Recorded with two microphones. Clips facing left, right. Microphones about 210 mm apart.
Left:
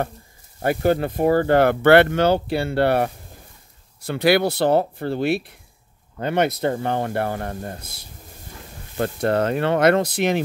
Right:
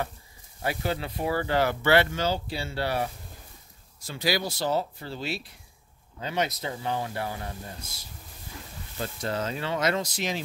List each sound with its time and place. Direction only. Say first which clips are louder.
0.6 s speech: left 10 dB; 50° left (ahead or behind)